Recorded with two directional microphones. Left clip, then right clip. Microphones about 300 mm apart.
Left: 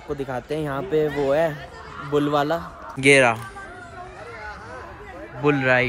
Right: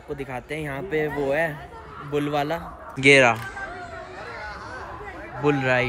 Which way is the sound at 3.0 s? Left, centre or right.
Centre.